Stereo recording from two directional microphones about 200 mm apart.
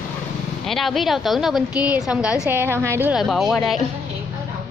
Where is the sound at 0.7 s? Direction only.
Centre (ahead or behind).